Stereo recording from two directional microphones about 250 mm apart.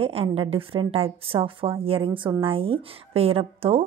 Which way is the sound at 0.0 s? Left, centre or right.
Right.